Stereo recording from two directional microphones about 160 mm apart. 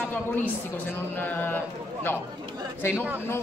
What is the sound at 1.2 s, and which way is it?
Speech, 10° left (ahead or behind).